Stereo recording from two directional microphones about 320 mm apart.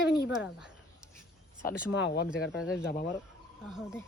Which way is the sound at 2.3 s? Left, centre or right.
Centre.